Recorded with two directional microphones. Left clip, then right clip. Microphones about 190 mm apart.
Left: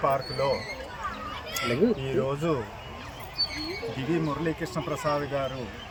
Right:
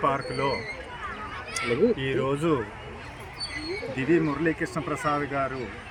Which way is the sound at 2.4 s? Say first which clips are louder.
Right 3 dB; 30° right (ahead or behind).